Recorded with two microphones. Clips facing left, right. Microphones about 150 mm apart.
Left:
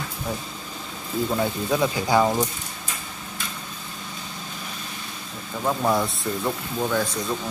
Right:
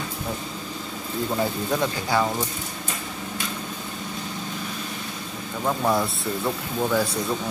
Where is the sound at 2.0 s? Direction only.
15° left (ahead or behind).